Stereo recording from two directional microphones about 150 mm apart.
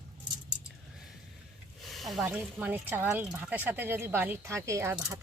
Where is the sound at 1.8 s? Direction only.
Centre (ahead or behind).